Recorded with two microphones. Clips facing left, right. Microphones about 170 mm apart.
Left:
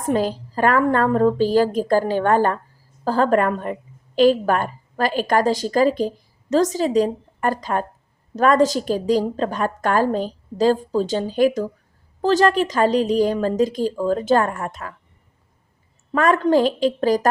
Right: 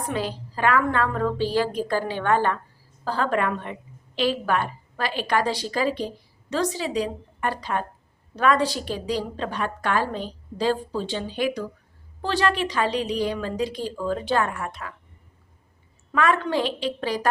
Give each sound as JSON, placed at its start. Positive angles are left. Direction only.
{"t": 0.1, "sound": "a woman's voice", "side_deg": 40}
{"t": 16.1, "sound": "a woman's voice", "side_deg": 40}